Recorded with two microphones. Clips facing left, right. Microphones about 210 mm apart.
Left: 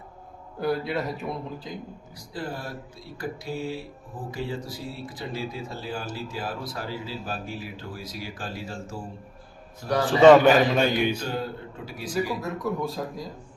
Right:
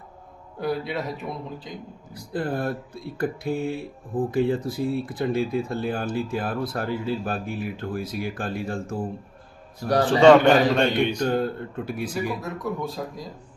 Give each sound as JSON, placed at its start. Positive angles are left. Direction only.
{"t": 0.6, "sound": "a man's voice", "side_deg": 0}
{"t": 2.1, "sound": "speech", "side_deg": -55}
{"t": 10.2, "sound": "a man's voice", "side_deg": 5}
{"t": 11.2, "sound": "speech", "side_deg": -55}
{"t": 12.4, "sound": "a man's voice", "side_deg": 0}